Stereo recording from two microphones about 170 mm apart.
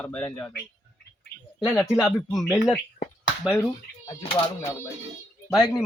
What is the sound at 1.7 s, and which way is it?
Speech, 20° left (ahead or behind).